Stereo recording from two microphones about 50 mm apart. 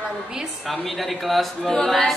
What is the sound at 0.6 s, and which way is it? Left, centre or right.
A man's voice, centre.